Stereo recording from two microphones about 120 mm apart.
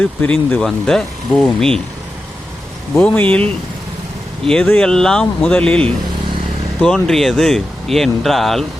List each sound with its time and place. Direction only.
0.0 s speech: 10° left (ahead or behind)
3.0 s speech: 10° left (ahead or behind)
4.4 s speech: 10° left (ahead or behind)